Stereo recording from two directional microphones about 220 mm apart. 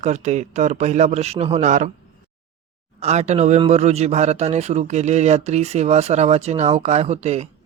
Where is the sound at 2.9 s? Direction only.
30° right (ahead or behind).